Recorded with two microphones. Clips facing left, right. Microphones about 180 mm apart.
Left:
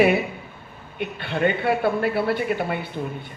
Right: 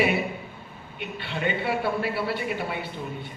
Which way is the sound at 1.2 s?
50° left (ahead or behind).